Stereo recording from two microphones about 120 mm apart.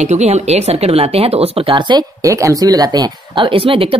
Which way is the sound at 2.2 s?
25° right (ahead or behind).